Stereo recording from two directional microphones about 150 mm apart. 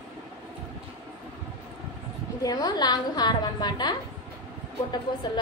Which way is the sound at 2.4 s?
25° left (ahead or behind).